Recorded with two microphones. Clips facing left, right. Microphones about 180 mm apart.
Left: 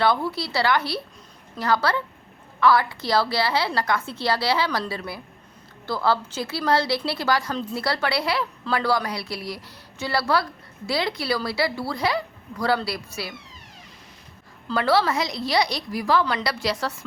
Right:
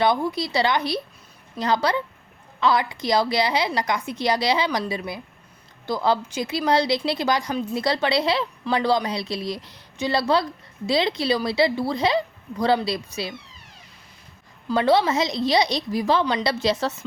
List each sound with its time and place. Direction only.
0.0 s a woman's voice: 15° right (ahead or behind)
14.7 s speech: 20° right (ahead or behind)